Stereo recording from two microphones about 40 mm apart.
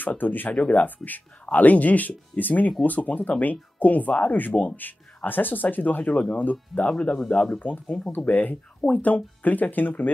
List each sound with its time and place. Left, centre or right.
0.0 s speech: left
6.1 s speech: left
7.0 s speech: left
7.6 s speech: left